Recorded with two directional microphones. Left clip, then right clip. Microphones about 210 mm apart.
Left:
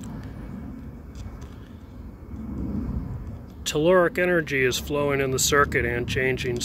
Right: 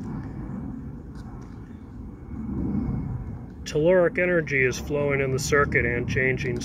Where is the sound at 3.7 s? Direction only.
25° left (ahead or behind).